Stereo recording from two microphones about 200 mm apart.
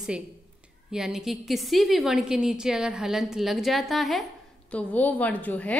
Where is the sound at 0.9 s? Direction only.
5° right (ahead or behind).